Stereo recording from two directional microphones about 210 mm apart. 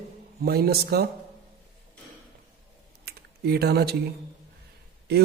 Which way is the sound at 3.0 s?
50° right (ahead or behind).